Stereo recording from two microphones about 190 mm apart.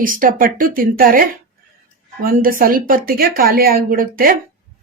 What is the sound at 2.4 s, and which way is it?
Speech, 50° right (ahead or behind).